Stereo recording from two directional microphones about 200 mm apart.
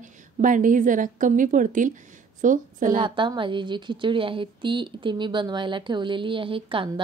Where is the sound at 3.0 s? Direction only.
25° right (ahead or behind).